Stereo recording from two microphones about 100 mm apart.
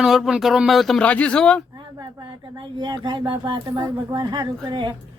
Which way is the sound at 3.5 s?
40° right (ahead or behind).